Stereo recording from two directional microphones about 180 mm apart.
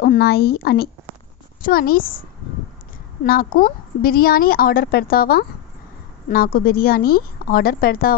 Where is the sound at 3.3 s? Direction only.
55° left (ahead or behind).